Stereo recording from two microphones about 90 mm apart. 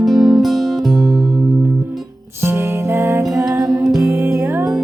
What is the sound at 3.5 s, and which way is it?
Music, 5° right (ahead or behind).